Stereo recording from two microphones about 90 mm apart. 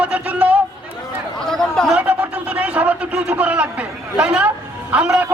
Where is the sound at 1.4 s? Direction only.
5° left (ahead or behind).